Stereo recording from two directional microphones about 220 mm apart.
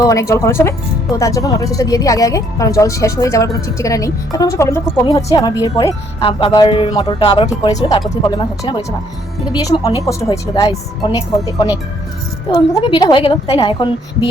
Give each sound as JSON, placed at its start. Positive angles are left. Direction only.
{"t": 0.0, "sound": "a woman's voice", "side_deg": 15}